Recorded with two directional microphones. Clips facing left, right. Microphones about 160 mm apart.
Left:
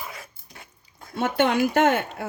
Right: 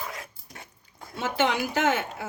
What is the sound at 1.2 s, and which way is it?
A woman's voice, 60° left (ahead or behind).